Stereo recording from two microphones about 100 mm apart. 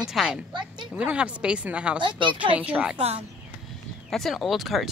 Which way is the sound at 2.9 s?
90° right.